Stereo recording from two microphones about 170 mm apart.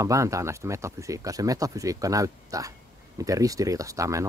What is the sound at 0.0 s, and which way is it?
Speech, 20° right (ahead or behind).